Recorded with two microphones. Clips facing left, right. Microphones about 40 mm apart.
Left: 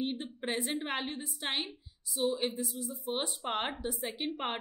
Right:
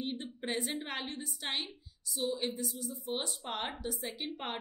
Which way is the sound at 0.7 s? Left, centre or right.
Centre.